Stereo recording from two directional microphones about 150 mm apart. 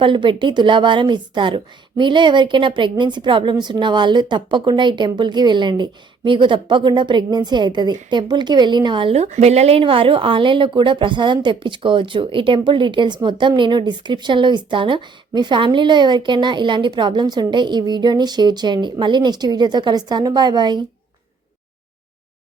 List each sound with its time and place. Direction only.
0.0 s a woman's voice: 35° right (ahead or behind)